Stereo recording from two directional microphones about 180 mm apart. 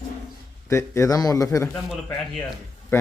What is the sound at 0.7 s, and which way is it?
Speech, 15° left (ahead or behind).